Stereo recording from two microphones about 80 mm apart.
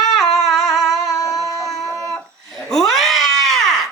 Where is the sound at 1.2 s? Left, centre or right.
Left.